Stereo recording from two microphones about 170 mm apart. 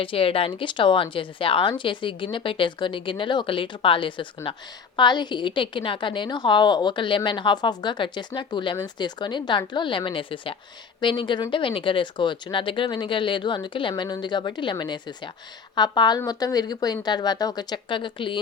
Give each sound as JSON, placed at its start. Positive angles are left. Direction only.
{"t": 0.0, "sound": "a woman's voice", "side_deg": 30}